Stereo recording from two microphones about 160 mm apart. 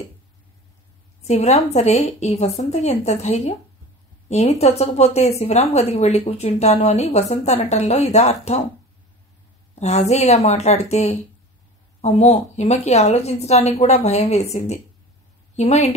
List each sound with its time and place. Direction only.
1.2 s a woman's voice: 45° left (ahead or behind)
9.8 s a woman's voice: 45° left (ahead or behind)